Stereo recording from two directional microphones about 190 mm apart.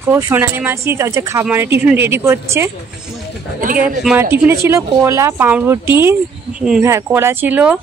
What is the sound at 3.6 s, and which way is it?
Speech, 45° right (ahead or behind).